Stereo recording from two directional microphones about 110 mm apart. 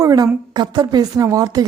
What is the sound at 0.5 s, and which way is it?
Speech, 40° right (ahead or behind).